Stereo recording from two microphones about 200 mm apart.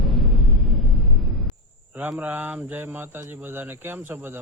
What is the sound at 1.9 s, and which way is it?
Speech, 10° right (ahead or behind).